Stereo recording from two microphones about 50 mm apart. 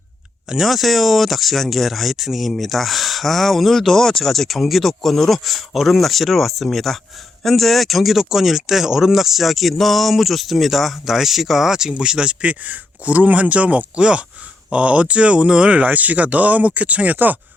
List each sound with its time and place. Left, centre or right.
0.4 s speech: centre; by 17.3 s right